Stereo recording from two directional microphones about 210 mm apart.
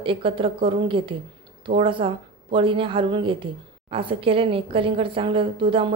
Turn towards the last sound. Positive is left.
turn(degrees=-25)  # may be behind; listen again after turning